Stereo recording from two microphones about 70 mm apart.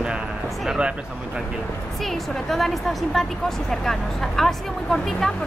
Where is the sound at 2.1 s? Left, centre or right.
Centre.